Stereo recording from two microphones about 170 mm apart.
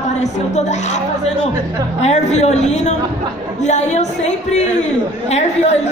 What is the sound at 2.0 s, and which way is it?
A woman's voice, 40° left (ahead or behind).